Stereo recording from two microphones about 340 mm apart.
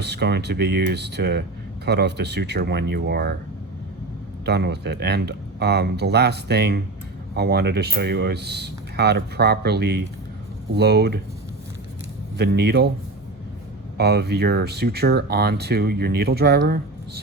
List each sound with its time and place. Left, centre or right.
0.0 s speech: right
4.4 s speech: right
12.4 s speech: right
14.0 s speech: right